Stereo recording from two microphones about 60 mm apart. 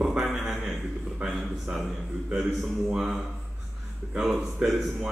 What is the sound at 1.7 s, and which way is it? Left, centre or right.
Speech, centre.